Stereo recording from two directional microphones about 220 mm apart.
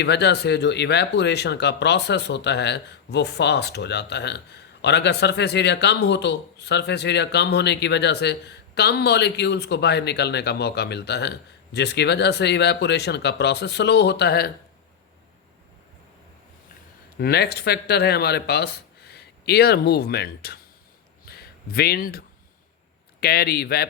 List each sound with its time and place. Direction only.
0.0 s speech: 50° left (ahead or behind)
17.2 s speech: 45° left (ahead or behind)
21.2 s a sound: 45° left (ahead or behind)
23.2 s speech: 45° left (ahead or behind)